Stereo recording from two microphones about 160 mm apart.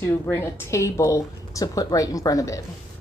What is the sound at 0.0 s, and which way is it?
A woman's voice, 15° left (ahead or behind).